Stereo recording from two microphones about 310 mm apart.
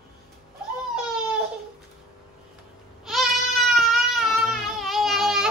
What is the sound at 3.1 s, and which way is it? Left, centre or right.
Goat, centre.